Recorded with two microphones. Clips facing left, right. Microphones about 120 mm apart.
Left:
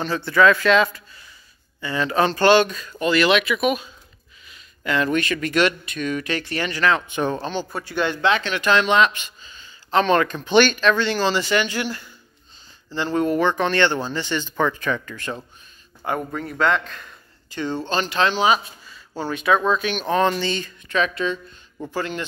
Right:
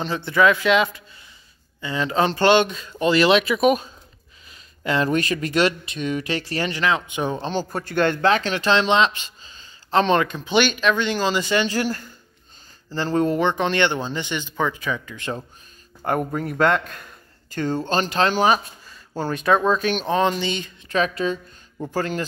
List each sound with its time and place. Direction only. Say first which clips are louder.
0.0 s speech: left 1 dB; 20° right (ahead or behind)
6.8 s speech: left 4 dB; 15° right (ahead or behind)
7.4 s speech: right 2 dB; 40° right (ahead or behind)
13.4 s speech: left 1 dB; 20° right (ahead or behind)
15.1 s speech: right 1 dB; 25° right (ahead or behind)
16.0 s speech: right 2 dB; 45° right (ahead or behind)
16.4 s a man's voice: right 1 dB; 5° right (ahead or behind)
17.0 s a sound: even; 45° right (ahead or behind)
17.8 s speech: even; 40° right (ahead or behind)
20.1 s speech: left 2 dB; 20° right (ahead or behind)
20.9 s speech: right 1 dB; 35° right (ahead or behind)